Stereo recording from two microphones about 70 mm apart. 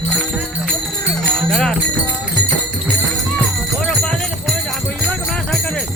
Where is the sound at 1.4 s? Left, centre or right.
Centre.